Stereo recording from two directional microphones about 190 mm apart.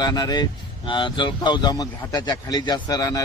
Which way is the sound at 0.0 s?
20° left (ahead or behind).